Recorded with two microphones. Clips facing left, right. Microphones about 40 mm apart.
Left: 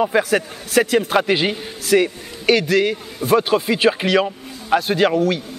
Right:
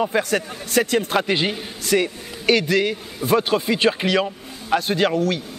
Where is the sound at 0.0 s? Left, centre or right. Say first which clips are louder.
Left 3 dB; centre.